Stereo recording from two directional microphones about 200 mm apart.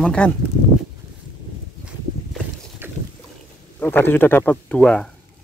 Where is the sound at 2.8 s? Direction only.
10° right (ahead or behind).